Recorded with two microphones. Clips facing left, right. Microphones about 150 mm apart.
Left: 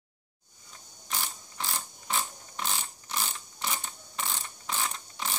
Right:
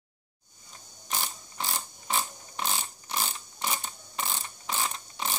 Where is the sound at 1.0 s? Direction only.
15° right (ahead or behind).